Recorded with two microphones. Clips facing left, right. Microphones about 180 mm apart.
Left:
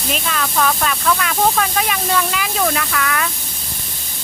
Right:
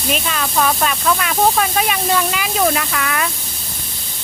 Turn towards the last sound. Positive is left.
turn(degrees=-20)  # may be behind; listen again after turning